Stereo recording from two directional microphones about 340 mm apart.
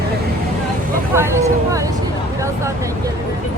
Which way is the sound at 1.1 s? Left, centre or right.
Centre.